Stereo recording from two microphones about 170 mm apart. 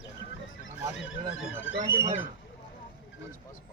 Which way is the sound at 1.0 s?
90° left.